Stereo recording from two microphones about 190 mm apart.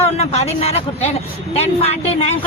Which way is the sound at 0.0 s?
35° left (ahead or behind).